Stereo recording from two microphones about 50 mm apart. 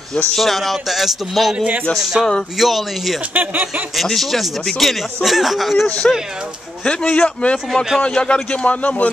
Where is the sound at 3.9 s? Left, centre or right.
Centre.